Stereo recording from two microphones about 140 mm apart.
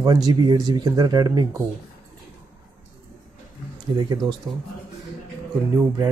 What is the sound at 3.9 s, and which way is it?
Speech, 30° right (ahead or behind).